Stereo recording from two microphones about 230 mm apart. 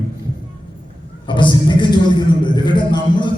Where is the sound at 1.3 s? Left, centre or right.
Left.